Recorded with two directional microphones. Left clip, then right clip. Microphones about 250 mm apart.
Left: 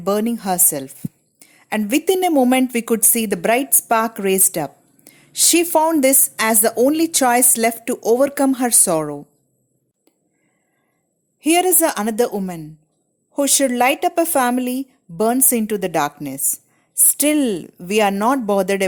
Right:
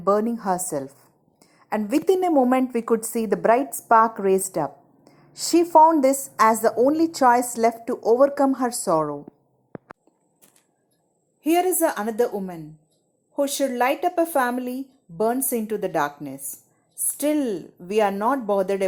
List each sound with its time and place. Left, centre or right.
0.0 s a woman's voice: left
11.3 s a woman's voice: left